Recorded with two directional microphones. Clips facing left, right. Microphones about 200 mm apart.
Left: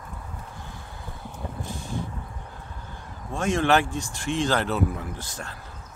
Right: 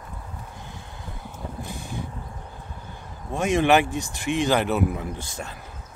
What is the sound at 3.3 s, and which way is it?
Speech, 20° right (ahead or behind).